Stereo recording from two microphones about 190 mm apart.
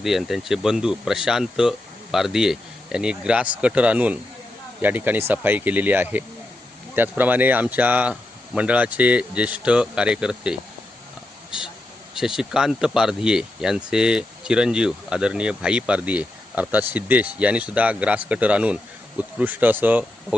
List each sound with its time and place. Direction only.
0.0 s speech: centre (ahead or behind)
12.1 s speech: centre (ahead or behind)